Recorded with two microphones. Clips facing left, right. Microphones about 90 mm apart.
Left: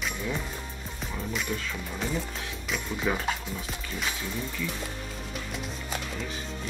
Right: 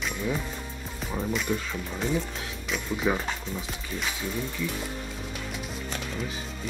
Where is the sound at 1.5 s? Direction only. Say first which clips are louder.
Right 5 dB; 25° right (ahead or behind).